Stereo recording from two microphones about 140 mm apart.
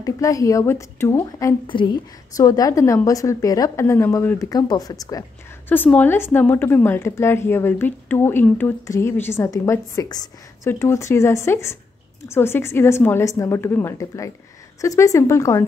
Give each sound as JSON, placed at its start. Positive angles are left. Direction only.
{"t": 0.0, "sound": "a woman's voice", "side_deg": 25}
{"t": 1.7, "sound": "a woman's voice", "side_deg": 35}
{"t": 2.3, "sound": "a woman's voice", "side_deg": 25}
{"t": 5.9, "sound": "a woman's voice", "side_deg": 15}